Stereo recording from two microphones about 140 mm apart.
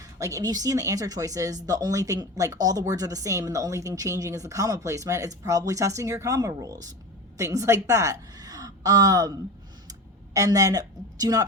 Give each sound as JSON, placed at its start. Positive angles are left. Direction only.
{"t": 0.2, "sound": "a woman's voice", "side_deg": -25}